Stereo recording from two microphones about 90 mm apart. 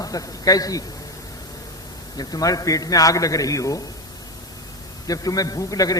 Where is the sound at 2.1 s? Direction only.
45° left (ahead or behind).